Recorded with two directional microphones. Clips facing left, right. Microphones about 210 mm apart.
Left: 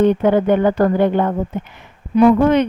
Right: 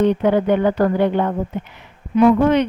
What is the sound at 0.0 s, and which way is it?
A woman's voice, 50° left (ahead or behind).